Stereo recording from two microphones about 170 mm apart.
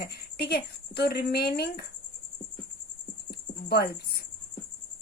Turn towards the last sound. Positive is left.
turn(degrees=70)  # may be behind; listen again after turning